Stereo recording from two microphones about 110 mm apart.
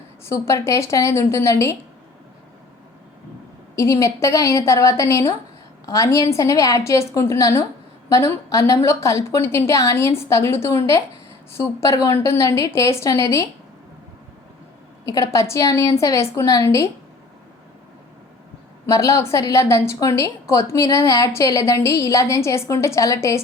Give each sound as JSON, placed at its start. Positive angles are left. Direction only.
{"t": 0.3, "sound": "a woman's voice", "side_deg": 25}
{"t": 3.8, "sound": "a woman's voice", "side_deg": 30}
{"t": 15.0, "sound": "a woman's voice", "side_deg": 30}
{"t": 18.9, "sound": "a woman's voice", "side_deg": 30}